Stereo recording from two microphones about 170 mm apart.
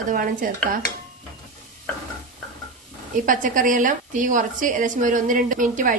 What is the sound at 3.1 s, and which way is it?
A woman's voice, 50° right (ahead or behind).